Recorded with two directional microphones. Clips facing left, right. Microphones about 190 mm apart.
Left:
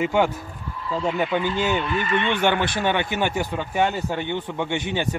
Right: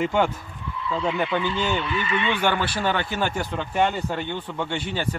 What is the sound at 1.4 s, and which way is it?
Speech, 45° left (ahead or behind).